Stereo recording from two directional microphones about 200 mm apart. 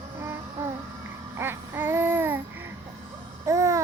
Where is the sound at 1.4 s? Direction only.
10° right (ahead or behind).